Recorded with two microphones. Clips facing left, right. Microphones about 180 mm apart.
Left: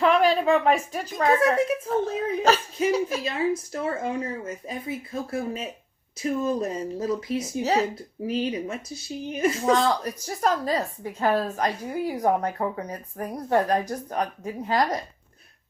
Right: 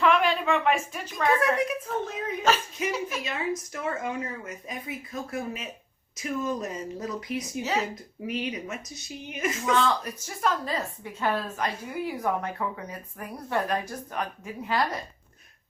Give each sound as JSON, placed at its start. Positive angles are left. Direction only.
{"t": 0.0, "sound": "speech", "side_deg": 40}
{"t": 1.4, "sound": "speech", "side_deg": 25}